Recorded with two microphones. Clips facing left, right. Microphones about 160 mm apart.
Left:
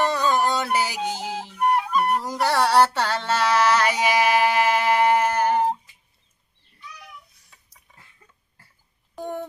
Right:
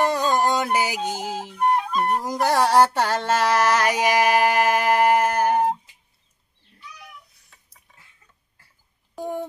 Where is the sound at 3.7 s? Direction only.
15° right (ahead or behind).